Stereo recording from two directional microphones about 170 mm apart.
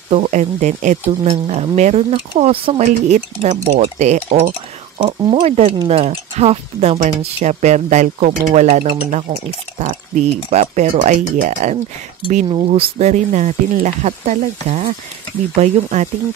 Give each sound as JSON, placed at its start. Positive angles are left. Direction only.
{"t": 0.1, "sound": "speech", "side_deg": -45}
{"t": 2.8, "sound": "speech", "side_deg": -45}
{"t": 5.0, "sound": "speech", "side_deg": -25}
{"t": 5.8, "sound": "speech", "side_deg": -40}
{"t": 12.4, "sound": "speech", "side_deg": -35}